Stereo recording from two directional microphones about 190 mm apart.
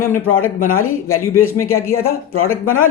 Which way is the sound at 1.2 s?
15° left (ahead or behind).